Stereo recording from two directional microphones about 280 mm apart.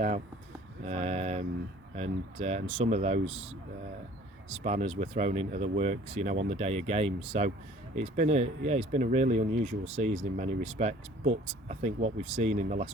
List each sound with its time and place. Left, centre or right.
0.9 s speech: right